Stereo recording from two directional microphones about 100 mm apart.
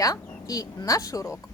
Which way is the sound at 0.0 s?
35° left (ahead or behind).